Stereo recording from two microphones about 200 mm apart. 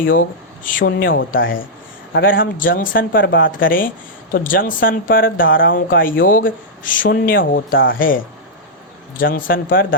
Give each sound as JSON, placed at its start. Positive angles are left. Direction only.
{"t": 0.0, "sound": "speech", "side_deg": 45}
{"t": 1.4, "sound": "speech", "side_deg": 75}
{"t": 2.1, "sound": "a man's voice", "side_deg": 60}
{"t": 2.4, "sound": "speech", "side_deg": 45}